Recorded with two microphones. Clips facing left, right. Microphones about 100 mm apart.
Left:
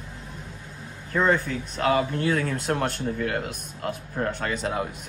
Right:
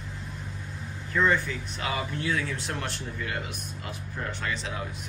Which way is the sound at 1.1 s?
40° left (ahead or behind).